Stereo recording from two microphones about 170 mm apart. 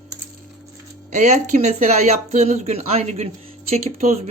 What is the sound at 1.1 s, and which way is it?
Speech, 45° right (ahead or behind).